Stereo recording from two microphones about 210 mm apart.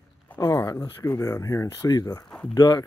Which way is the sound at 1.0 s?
15° left (ahead or behind).